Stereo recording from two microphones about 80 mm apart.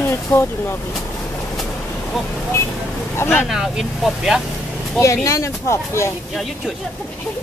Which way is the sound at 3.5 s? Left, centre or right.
Centre.